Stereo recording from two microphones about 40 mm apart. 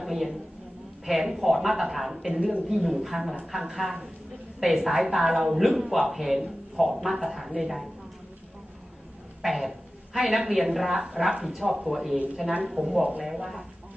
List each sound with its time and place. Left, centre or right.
0.0 s a woman's voice: centre
9.4 s a woman's voice: centre